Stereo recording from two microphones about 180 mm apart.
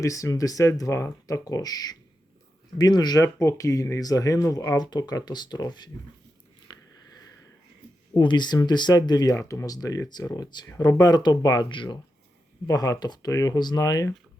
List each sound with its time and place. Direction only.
0.0 s speech: 15° left (ahead or behind)
8.1 s speech: 25° left (ahead or behind)